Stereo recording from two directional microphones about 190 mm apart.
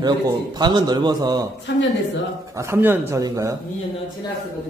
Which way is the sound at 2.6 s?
10° right (ahead or behind).